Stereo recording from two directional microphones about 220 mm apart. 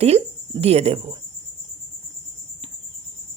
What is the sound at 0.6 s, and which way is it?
Speech, 30° right (ahead or behind).